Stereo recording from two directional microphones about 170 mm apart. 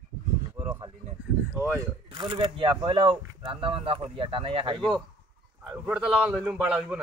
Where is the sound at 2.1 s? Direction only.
30° right (ahead or behind).